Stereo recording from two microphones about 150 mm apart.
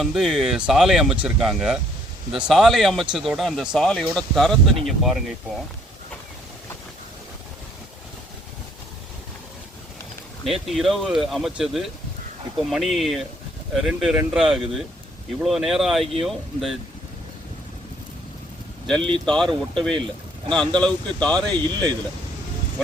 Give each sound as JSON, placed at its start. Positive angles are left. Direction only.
{"t": 0.0, "sound": "speech", "side_deg": 0}
{"t": 10.4, "sound": "speech", "side_deg": 0}
{"t": 18.9, "sound": "speech", "side_deg": 5}
{"t": 21.6, "sound": "speech", "side_deg": -30}